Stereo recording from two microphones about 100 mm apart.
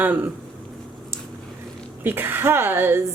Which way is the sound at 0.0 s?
20° right (ahead or behind).